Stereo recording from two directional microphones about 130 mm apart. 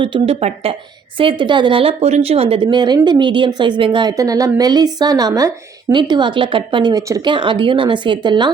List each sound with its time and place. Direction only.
0.0 s a woman's voice: 40° right (ahead or behind)
4.2 s a woman's voice: 25° right (ahead or behind)